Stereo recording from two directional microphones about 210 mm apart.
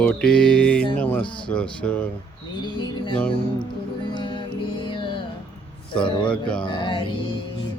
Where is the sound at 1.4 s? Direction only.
5° left (ahead or behind).